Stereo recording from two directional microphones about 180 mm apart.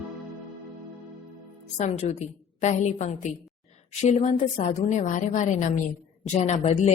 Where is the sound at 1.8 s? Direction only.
35° left (ahead or behind).